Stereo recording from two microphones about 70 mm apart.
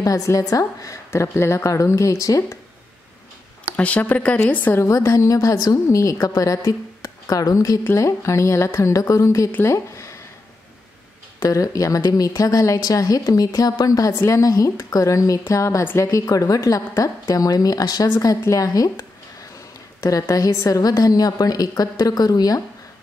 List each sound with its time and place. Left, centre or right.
0.0 s a woman's voice: left
3.7 s speech: centre
4.7 s speech: left
7.8 s a woman's voice: left
11.5 s speech: left
18.5 s speech: left